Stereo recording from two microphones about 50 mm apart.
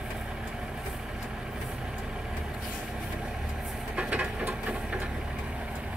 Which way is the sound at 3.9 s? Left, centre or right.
Right.